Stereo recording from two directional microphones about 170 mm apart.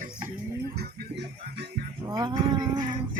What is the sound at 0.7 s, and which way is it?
Music, 65° right (ahead or behind).